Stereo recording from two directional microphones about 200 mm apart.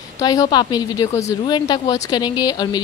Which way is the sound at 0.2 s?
20° left (ahead or behind).